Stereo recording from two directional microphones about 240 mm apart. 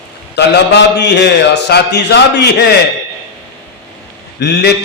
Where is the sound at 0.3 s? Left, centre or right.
Left.